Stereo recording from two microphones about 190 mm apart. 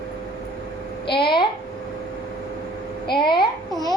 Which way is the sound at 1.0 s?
25° left (ahead or behind).